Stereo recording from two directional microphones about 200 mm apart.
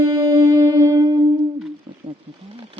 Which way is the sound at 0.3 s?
15° right (ahead or behind).